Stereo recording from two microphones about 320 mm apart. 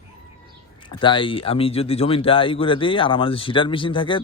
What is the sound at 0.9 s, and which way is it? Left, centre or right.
Speech, centre.